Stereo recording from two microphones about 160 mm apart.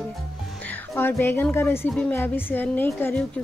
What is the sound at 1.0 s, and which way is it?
Speech, 15° left (ahead or behind).